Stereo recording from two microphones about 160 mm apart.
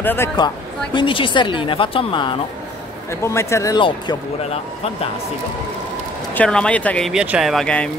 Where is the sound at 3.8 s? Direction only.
30° left (ahead or behind).